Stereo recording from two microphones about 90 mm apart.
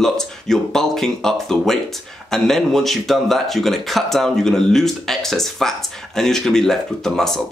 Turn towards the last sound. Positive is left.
turn(degrees=5)  # may be behind; listen again after turning